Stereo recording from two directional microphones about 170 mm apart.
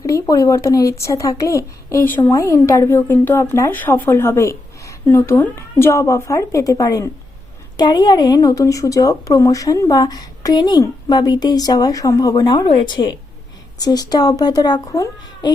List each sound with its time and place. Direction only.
0.0 s a woman's voice: 20° left (ahead or behind)